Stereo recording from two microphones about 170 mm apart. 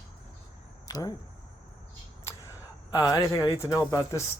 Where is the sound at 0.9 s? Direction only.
20° left (ahead or behind).